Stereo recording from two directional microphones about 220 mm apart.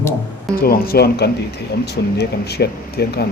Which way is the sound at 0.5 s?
45° left (ahead or behind).